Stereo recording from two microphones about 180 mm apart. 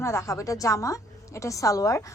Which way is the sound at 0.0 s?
15° left (ahead or behind).